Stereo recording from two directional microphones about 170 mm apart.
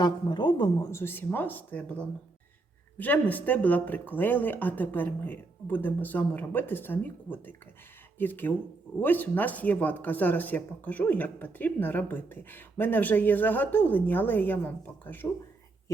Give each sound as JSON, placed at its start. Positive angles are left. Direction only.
{"t": 0.0, "sound": "speech", "side_deg": 25}